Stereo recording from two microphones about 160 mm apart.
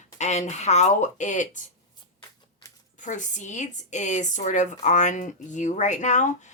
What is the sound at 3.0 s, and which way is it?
Speech, 50° left (ahead or behind).